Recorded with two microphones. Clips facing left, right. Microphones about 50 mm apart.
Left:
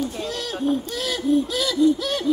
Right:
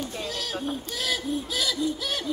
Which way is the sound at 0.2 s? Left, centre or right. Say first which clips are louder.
Left 5 dB; centre.